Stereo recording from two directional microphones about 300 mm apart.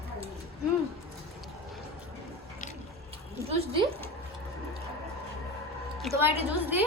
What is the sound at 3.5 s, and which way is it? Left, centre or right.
Speech, centre.